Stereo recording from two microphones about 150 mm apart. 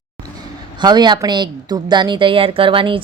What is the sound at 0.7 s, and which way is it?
A woman's voice, 30° right (ahead or behind).